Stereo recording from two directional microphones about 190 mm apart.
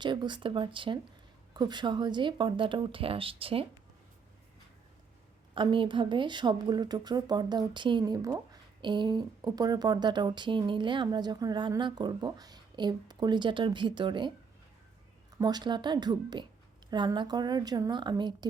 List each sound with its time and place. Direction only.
0.0 s speech: 25° right (ahead or behind)
5.5 s speech: 25° right (ahead or behind)
15.4 s speech: 20° right (ahead or behind)